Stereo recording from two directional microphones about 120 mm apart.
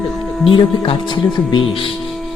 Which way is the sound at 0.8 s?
40° left (ahead or behind).